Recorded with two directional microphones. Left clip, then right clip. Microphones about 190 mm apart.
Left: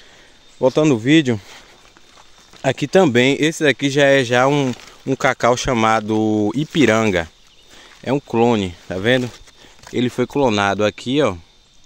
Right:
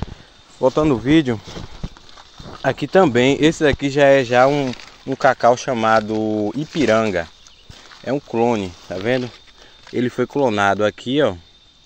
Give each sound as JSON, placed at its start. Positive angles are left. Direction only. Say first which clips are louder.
{"t": 0.6, "sound": "speech", "louder": "left 1 dB", "side_deg": 30}
{"t": 2.6, "sound": "speech", "louder": "even", "side_deg": 35}
{"t": 4.5, "sound": "speech", "louder": "left 1 dB", "side_deg": 50}